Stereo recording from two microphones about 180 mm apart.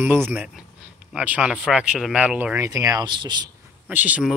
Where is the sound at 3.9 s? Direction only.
10° right (ahead or behind).